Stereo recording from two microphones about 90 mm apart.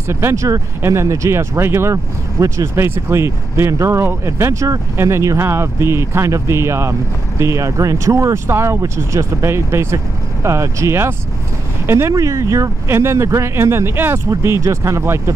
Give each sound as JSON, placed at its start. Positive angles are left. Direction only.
{"t": 0.1, "sound": "speech", "side_deg": -30}